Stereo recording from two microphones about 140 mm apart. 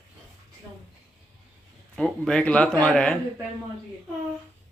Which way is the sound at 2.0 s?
5° left (ahead or behind).